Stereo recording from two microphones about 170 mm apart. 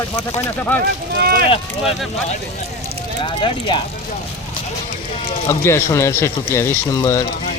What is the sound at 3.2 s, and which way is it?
Speech, 30° left (ahead or behind).